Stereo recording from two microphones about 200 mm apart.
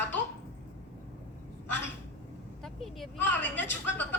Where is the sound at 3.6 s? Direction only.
10° left (ahead or behind).